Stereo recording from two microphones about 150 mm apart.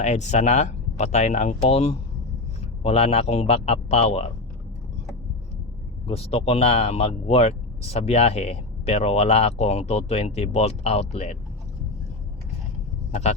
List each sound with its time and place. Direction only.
0.0 s speech: 50° left (ahead or behind)
6.1 s speech: 40° left (ahead or behind)